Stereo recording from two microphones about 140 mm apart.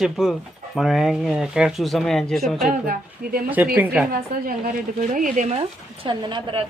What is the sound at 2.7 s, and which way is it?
Speech, 90° right.